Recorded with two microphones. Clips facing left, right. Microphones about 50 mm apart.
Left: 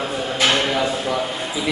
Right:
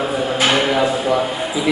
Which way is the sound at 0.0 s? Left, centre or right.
Centre.